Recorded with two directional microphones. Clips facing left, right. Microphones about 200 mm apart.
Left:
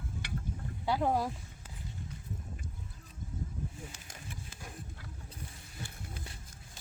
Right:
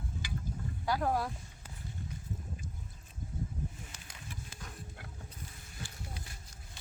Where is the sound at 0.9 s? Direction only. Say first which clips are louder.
Left 2 dB; 20° left (ahead or behind).